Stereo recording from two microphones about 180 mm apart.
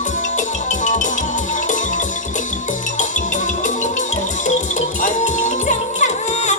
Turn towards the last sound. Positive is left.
turn(degrees=40)  # may be behind; listen again after turning